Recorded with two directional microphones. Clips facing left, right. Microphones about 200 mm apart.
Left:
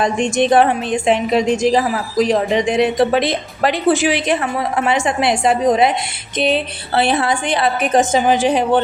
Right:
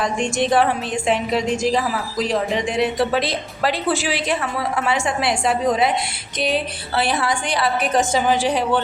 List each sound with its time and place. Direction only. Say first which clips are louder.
0.0 s a woman's voice: left 5 dB; 20° left (ahead or behind)